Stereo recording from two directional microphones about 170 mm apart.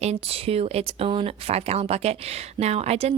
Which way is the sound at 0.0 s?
35° right (ahead or behind).